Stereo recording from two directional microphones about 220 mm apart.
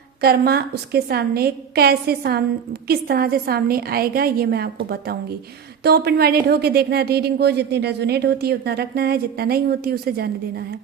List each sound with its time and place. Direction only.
0.2 s speech: 45° right (ahead or behind)